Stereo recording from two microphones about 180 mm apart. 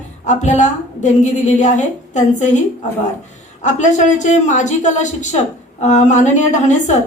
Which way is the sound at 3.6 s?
40° left (ahead or behind).